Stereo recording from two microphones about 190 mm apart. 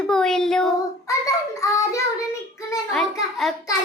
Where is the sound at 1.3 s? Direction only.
15° left (ahead or behind).